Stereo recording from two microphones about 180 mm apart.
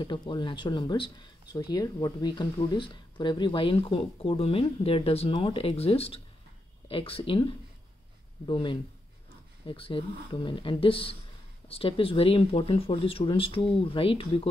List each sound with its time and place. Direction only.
0.0 s speech: 25° left (ahead or behind)
8.5 s speech: 30° left (ahead or behind)